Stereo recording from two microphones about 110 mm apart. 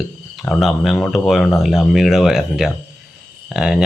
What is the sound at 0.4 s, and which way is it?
Speech, centre (ahead or behind).